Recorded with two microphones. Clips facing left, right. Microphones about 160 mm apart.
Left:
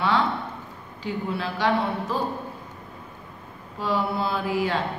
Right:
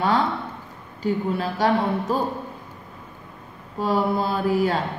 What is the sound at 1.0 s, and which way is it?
Speech, 45° right (ahead or behind).